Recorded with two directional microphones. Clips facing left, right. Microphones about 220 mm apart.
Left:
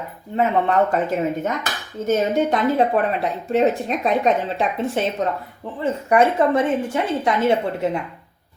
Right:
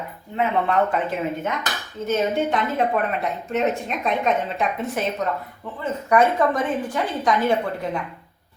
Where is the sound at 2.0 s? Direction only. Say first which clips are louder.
Left 3 dB; 40° left (ahead or behind).